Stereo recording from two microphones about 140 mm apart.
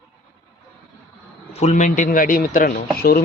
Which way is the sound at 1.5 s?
55° left (ahead or behind).